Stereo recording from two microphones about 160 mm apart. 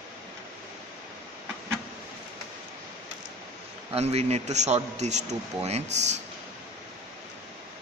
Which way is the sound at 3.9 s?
40° right (ahead or behind).